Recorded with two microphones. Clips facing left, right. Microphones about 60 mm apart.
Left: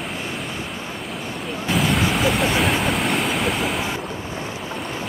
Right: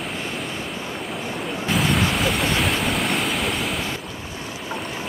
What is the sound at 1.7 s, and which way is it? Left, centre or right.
Waves, centre.